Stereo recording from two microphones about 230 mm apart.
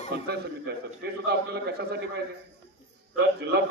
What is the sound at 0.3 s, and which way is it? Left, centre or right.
A man's voice, right.